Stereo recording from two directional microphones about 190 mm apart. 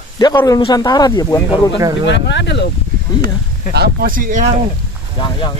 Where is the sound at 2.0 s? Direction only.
65° left (ahead or behind).